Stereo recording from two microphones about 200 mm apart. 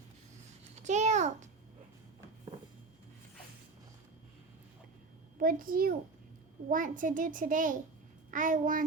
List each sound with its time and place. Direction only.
0.8 s a child's voice: 35° right (ahead or behind)
5.4 s a child's voice: 45° right (ahead or behind)